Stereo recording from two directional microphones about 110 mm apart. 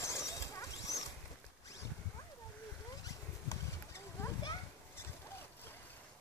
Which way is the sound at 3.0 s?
25° left (ahead or behind).